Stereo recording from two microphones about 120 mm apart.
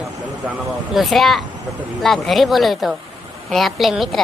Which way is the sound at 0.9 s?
Centre (ahead or behind).